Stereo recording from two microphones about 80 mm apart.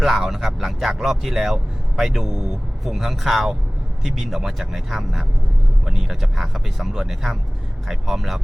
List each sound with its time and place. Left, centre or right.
0.0 s speech: centre